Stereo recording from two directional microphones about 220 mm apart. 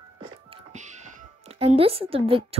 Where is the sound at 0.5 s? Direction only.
35° right (ahead or behind).